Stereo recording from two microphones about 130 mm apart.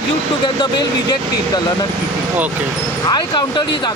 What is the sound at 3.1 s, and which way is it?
Speech, 35° left (ahead or behind).